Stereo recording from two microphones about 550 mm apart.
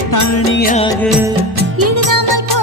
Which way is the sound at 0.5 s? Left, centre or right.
Centre.